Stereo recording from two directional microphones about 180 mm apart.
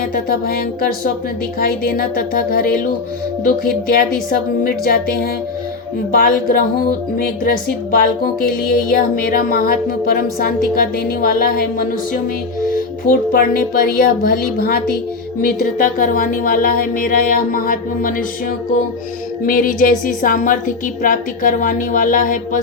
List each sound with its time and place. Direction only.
0.0 s a woman's voice: 55° left (ahead or behind)
4.3 s a woman's voice: 55° left (ahead or behind)
19.5 s a woman's voice: 50° left (ahead or behind)